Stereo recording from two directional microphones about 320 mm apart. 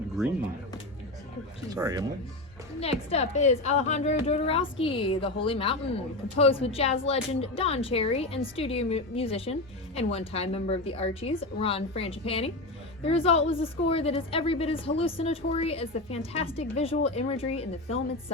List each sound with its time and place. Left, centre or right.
1.7 s speech: centre
2.8 s a woman's voice: centre